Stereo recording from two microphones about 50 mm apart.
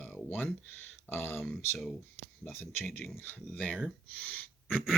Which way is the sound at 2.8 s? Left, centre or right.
Left.